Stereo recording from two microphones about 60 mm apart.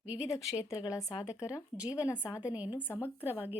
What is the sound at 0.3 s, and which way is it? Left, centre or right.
Speech, left.